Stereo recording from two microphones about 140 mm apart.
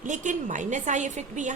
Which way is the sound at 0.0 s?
65° right (ahead or behind).